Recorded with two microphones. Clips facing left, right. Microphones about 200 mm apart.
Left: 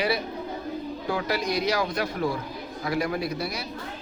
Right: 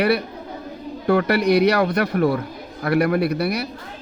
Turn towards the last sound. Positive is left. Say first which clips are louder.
# right 9 dB
turn(degrees=-65)  # may be behind; listen again after turning